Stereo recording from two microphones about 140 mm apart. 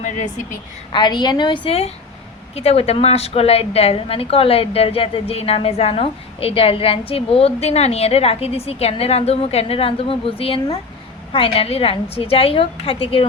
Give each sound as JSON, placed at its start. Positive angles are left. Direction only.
{"t": 0.9, "sound": "a woman's voice", "side_deg": 30}